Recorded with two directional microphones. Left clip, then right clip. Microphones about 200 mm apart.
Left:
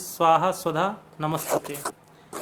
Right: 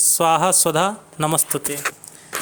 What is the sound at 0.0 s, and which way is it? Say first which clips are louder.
Speech: right 3 dB; 45° right (ahead or behind).